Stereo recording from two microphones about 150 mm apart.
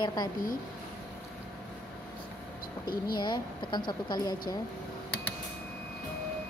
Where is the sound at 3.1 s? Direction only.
30° left (ahead or behind).